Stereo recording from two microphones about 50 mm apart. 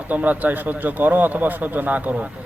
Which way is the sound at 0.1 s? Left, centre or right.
Right.